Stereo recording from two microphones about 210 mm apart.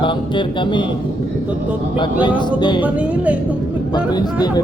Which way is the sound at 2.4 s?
20° left (ahead or behind).